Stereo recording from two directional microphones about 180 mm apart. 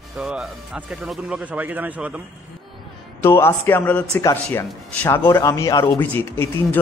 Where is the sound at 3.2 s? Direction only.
15° left (ahead or behind).